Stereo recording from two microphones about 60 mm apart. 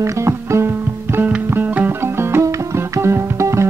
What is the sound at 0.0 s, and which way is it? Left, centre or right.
Music, right.